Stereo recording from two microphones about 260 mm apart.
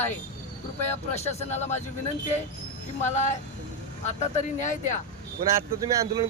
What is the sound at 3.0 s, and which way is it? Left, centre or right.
Speech, left.